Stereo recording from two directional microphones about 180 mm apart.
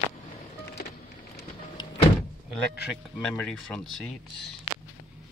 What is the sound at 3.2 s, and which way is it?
Speech, 5° left (ahead or behind).